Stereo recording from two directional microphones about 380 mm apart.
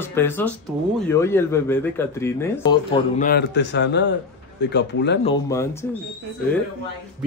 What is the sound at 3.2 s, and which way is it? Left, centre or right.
Speech, left.